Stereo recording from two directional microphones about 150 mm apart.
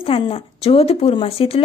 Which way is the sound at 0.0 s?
40° left (ahead or behind).